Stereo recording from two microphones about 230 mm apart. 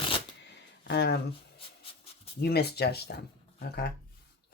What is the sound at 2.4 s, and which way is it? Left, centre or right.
Speech, left.